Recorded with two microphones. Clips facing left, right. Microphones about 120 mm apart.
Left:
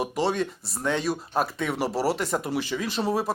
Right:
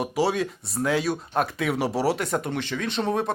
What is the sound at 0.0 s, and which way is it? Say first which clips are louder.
Speech: right 1 dB; centre (ahead or behind).